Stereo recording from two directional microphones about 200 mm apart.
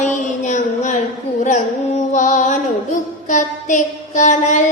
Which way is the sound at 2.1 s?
40° left (ahead or behind).